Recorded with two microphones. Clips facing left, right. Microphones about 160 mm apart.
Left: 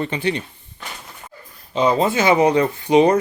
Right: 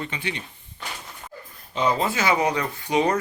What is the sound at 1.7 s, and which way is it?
Speech, 25° left (ahead or behind).